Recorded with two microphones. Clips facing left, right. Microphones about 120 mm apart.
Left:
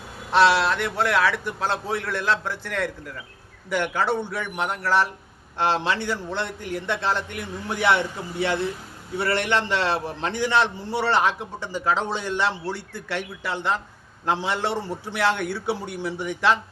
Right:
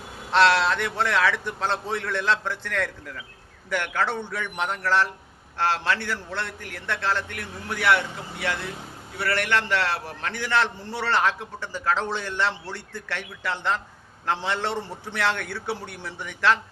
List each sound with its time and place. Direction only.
0.3 s a man's voice: 10° left (ahead or behind)